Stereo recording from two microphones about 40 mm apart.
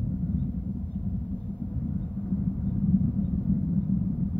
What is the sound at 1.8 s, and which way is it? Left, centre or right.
Vehicle, left.